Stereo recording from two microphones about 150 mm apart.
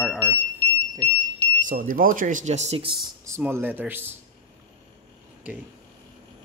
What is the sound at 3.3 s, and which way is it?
Speech, 15° right (ahead or behind).